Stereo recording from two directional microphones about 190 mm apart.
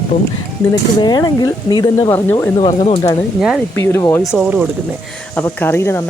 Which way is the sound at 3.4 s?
Centre (ahead or behind).